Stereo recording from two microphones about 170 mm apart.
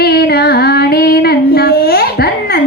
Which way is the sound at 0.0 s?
65° left (ahead or behind).